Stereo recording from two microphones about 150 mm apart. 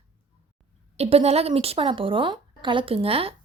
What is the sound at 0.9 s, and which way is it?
Speech, 40° right (ahead or behind).